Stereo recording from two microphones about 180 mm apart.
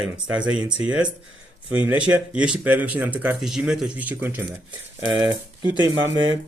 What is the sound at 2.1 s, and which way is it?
Speech, 5° right (ahead or behind).